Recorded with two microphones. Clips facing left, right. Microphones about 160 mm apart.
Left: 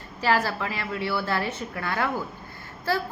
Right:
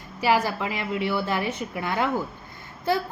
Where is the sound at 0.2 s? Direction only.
15° right (ahead or behind).